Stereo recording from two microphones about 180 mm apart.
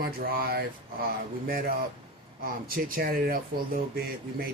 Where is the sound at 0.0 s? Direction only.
55° right (ahead or behind).